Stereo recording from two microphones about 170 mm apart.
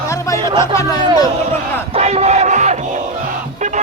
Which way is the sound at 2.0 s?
40° right (ahead or behind).